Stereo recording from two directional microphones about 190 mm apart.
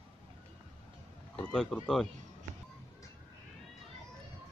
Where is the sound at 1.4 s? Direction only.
5° left (ahead or behind).